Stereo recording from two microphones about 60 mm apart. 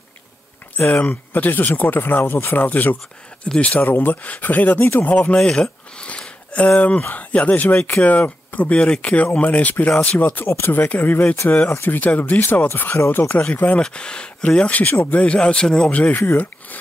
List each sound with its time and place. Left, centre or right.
0.7 s speech: left
3.8 s speech: left
5.1 s speech: left
5.4 s a sound: centre
7.0 s speech: left
13.4 s speech: left
14.9 s speech: left
15.1 s speech: centre